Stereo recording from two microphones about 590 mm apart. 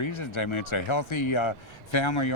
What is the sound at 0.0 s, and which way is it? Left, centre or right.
Speech, left.